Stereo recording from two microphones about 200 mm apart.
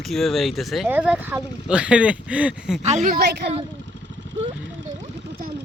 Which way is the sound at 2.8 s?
35° right (ahead or behind).